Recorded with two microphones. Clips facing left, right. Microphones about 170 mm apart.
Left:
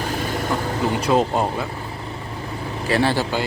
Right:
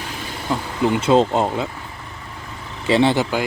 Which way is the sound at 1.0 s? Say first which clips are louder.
Right 3 dB; 25° right (ahead or behind).